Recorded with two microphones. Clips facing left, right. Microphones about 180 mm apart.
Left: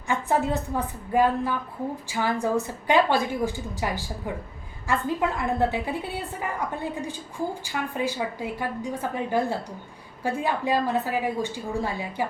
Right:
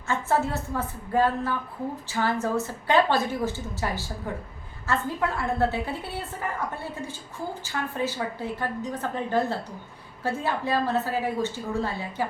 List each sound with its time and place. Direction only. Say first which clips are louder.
0.1 s a woman's voice: left 1 dB; 15° left (ahead or behind)